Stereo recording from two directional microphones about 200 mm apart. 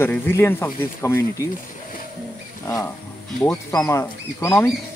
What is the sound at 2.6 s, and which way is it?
Speech, 15° left (ahead or behind).